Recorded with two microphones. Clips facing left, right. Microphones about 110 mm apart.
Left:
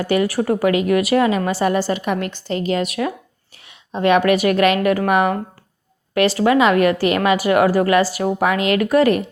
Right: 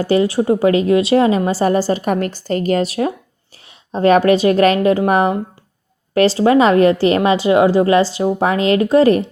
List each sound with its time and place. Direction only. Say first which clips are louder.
0.0 s a woman's voice: right 3 dB; 30° right (ahead or behind); by 2.8 s 45° right (ahead or behind)
2.8 s a woman's voice: right 3 dB; 30° right (ahead or behind)